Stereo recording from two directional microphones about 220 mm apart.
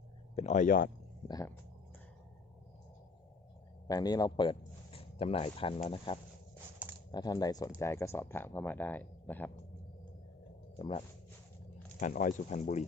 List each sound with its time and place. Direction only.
0.3 s speech: 35° left (ahead or behind)
3.8 s a man's voice: 20° left (ahead or behind)
10.8 s speech: 25° left (ahead or behind)
11.9 s speech: 35° left (ahead or behind)